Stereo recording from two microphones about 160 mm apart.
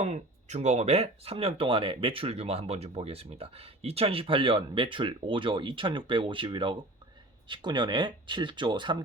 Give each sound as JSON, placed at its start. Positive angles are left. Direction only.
{"t": 0.0, "sound": "speech", "side_deg": -45}